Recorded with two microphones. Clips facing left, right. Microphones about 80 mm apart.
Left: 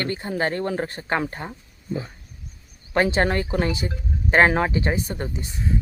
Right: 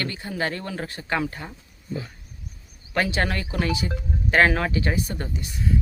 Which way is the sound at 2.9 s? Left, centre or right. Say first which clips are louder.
Left 4 dB; left.